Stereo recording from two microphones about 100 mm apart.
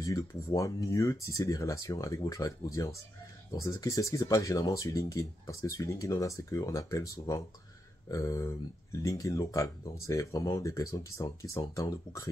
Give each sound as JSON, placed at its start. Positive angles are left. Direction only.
{"t": 0.0, "sound": "speech", "side_deg": 35}